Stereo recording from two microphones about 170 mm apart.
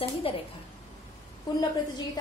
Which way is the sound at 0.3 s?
30° left (ahead or behind).